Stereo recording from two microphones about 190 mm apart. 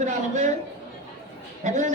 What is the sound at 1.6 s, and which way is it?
Speech, 40° right (ahead or behind).